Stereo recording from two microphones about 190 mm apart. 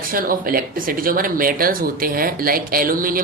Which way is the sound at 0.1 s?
50° right (ahead or behind).